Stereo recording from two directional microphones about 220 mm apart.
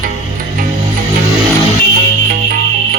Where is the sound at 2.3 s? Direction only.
40° right (ahead or behind).